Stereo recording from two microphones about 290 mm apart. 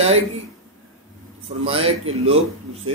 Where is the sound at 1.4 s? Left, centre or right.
Centre.